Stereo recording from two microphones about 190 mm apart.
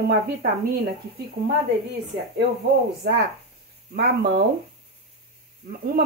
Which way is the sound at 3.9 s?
60° right (ahead or behind).